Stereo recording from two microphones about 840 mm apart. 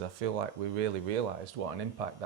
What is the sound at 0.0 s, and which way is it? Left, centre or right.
Speech, right.